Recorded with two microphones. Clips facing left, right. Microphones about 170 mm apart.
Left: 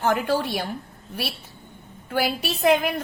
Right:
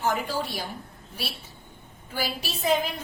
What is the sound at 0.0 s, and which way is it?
Speech, 60° left (ahead or behind).